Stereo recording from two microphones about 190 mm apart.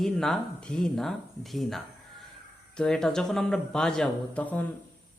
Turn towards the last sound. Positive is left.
turn(degrees=10)  # may be behind; listen again after turning